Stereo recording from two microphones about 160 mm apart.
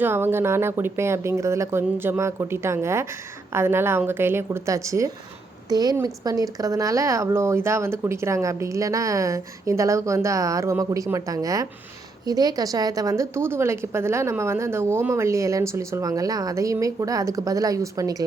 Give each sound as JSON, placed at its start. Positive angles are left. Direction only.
{"t": 0.0, "sound": "a woman's voice", "side_deg": -15}